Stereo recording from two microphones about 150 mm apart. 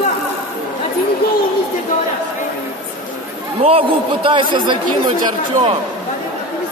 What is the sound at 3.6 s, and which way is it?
A man's voice, 40° right (ahead or behind).